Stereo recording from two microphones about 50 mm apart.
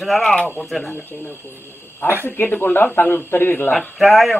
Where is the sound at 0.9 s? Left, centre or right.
Left.